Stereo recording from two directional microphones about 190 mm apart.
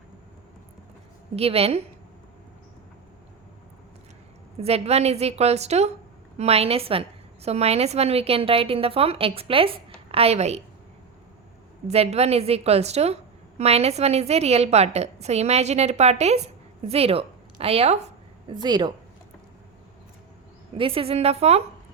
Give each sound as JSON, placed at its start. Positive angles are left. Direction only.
{"t": 1.4, "sound": "a woman's voice", "side_deg": -30}
{"t": 4.6, "sound": "a woman's voice", "side_deg": -35}
{"t": 11.9, "sound": "a woman's voice", "side_deg": -35}
{"t": 18.4, "sound": "a woman's voice", "side_deg": -20}
{"t": 20.7, "sound": "a woman's voice", "side_deg": -30}